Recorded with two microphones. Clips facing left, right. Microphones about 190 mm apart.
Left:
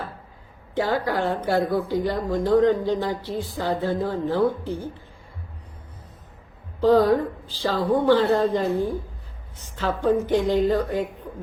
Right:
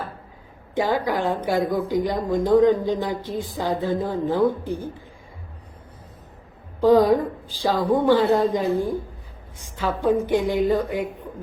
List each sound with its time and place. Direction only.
0.8 s speech: 15° right (ahead or behind)
6.7 s speech: 15° right (ahead or behind)